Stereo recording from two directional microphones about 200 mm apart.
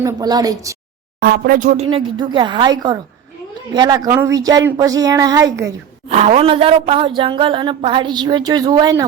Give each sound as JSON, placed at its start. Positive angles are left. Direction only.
{"t": 0.0, "sound": "a woman's voice", "side_deg": -20}
{"t": 1.2, "sound": "a woman's voice", "side_deg": -50}
{"t": 6.1, "sound": "a woman's voice", "side_deg": -35}